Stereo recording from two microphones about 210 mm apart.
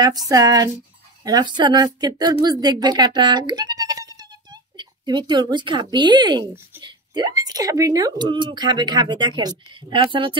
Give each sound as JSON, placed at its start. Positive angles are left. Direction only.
{"t": 0.0, "sound": "speech", "side_deg": -20}